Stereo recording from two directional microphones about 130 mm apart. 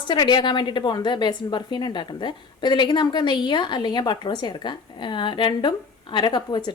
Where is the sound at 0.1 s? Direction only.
35° left (ahead or behind).